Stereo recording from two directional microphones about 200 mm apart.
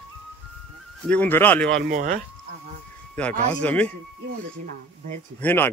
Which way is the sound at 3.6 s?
5° left (ahead or behind).